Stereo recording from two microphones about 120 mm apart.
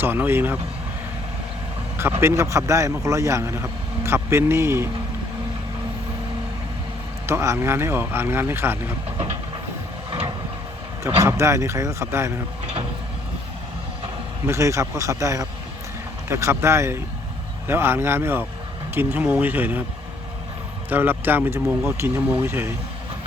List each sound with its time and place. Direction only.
0.0 s speech: 15° right (ahead or behind)
2.2 s speech: 25° right (ahead or behind)
7.3 s speech: 25° right (ahead or behind)
11.0 s speech: 25° right (ahead or behind)
14.4 s speech: 25° right (ahead or behind)
20.9 s speech: 15° right (ahead or behind)